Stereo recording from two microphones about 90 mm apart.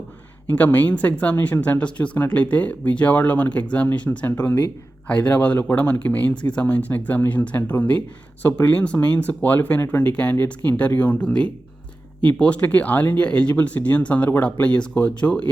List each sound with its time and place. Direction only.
0.4 s speech: 20° left (ahead or behind)